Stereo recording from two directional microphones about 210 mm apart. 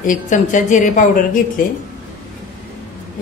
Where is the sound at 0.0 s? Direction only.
40° left (ahead or behind).